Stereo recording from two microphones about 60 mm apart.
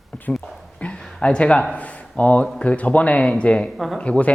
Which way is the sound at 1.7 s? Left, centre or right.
Left.